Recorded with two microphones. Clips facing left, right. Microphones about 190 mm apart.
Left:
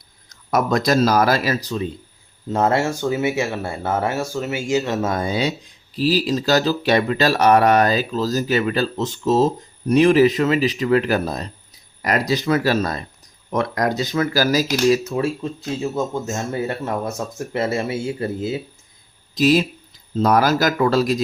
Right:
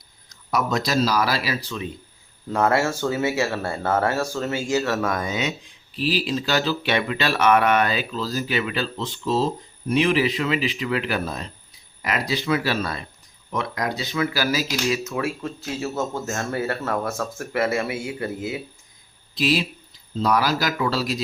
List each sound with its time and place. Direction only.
0.3 s speech: 50° left (ahead or behind)
2.5 s speech: 25° left (ahead or behind)
15.4 s speech: 20° left (ahead or behind)
19.3 s speech: 45° left (ahead or behind)